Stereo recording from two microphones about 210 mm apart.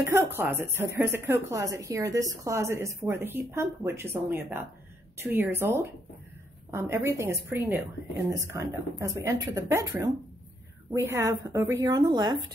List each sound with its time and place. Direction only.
0.0 s speech: 10° right (ahead or behind)